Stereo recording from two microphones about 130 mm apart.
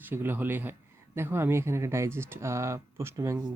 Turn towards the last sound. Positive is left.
turn(degrees=-25)  # may be behind; listen again after turning